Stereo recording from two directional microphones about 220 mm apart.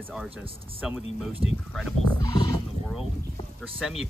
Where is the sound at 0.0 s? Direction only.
5° right (ahead or behind).